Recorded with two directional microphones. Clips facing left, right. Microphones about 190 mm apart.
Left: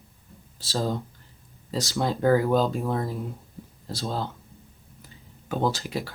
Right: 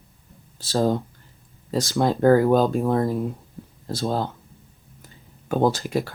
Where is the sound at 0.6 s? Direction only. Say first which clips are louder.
Right 6 dB; 55° right (ahead or behind).